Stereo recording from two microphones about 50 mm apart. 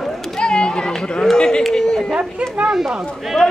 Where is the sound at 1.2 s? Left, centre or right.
Centre.